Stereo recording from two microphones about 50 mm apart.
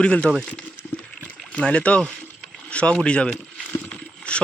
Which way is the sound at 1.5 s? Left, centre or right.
Left.